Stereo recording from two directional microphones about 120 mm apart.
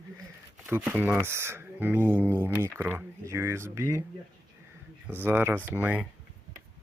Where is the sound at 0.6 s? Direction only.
15° right (ahead or behind).